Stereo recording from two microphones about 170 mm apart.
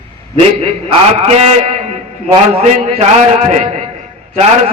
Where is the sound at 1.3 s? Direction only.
40° right (ahead or behind).